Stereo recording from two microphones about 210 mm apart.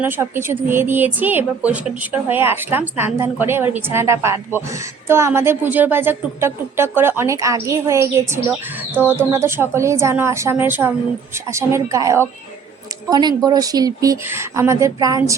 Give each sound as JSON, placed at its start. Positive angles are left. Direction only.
{"t": 0.0, "sound": "a woman's voice", "side_deg": -10}